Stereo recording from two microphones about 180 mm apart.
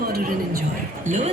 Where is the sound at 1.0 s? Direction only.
40° right (ahead or behind).